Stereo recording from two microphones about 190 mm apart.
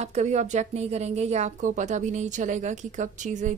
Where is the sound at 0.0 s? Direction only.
35° right (ahead or behind).